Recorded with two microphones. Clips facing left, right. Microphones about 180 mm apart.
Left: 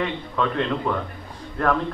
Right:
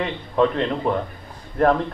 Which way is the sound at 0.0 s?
25° right (ahead or behind).